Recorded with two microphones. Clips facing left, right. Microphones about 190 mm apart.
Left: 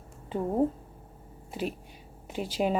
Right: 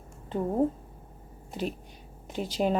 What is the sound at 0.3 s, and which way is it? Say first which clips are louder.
A woman's voice: even; 5° left (ahead or behind).